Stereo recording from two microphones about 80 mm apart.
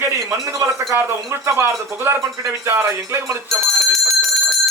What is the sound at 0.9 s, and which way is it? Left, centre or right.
Music, right.